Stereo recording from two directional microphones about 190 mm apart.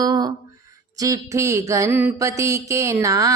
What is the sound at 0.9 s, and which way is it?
Mantra, 15° right (ahead or behind).